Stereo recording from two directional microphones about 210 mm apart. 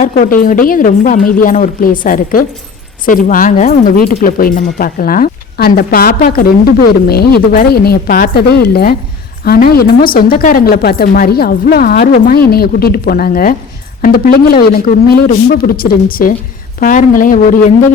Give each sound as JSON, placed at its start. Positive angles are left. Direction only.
{"t": 0.0, "sound": "a woman's voice", "side_deg": 40}